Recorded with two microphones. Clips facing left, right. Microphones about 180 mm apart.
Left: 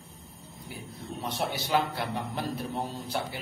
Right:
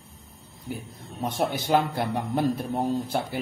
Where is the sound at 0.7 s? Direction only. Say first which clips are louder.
Right 3 dB; 45° right (ahead or behind).